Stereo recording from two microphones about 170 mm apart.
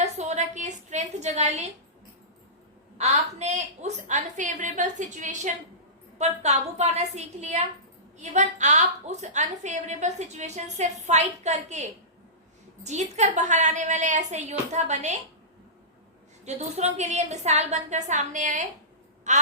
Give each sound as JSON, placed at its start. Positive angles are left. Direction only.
{"t": 0.0, "sound": "a sound", "side_deg": -40}
{"t": 3.0, "sound": "a woman's voice", "side_deg": -40}
{"t": 16.5, "sound": "a woman's voice", "side_deg": -40}